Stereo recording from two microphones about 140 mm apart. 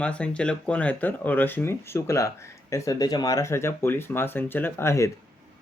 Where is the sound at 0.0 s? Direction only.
10° left (ahead or behind).